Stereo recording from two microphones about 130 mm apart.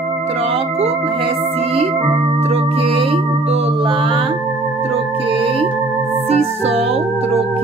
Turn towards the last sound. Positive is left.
turn(degrees=-50)  # may be behind; listen again after turning